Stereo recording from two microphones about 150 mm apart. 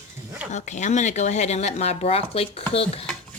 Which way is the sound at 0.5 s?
50° left (ahead or behind).